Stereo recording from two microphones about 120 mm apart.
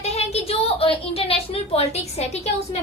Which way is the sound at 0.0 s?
60° left (ahead or behind).